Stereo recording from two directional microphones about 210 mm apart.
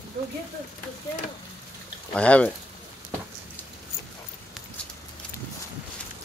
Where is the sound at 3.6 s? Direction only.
10° left (ahead or behind).